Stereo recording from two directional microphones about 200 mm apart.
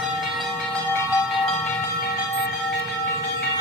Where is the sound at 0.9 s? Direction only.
10° left (ahead or behind).